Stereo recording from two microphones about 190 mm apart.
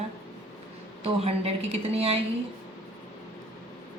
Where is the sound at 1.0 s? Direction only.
30° right (ahead or behind).